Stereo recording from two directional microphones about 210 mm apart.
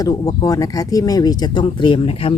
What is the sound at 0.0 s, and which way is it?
Speech, 20° left (ahead or behind).